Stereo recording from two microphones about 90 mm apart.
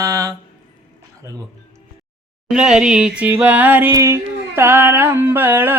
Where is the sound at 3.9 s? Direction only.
30° right (ahead or behind).